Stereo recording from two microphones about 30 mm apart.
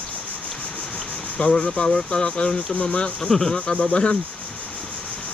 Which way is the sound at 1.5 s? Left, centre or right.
Left.